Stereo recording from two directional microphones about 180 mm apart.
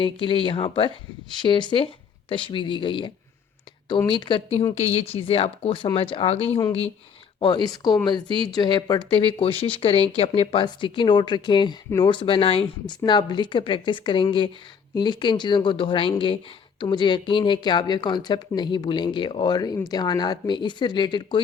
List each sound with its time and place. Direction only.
0.0 s speech: 30° left (ahead or behind)